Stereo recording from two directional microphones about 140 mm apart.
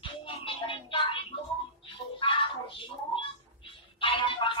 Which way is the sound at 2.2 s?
40° left (ahead or behind).